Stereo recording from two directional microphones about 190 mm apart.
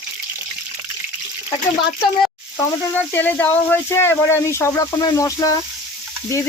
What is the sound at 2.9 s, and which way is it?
Speech, 10° left (ahead or behind).